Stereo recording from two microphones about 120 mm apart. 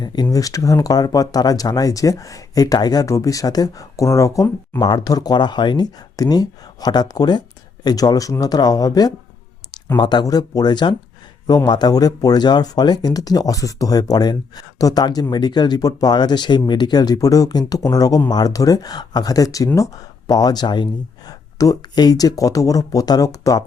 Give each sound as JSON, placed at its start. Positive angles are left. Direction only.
{"t": 0.0, "sound": "speech", "side_deg": 35}